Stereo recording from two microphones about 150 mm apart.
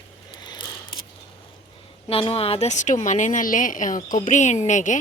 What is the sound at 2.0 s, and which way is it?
A woman's voice, 40° left (ahead or behind).